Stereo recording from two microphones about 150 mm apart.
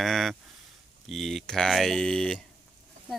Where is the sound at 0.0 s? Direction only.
Centre (ahead or behind).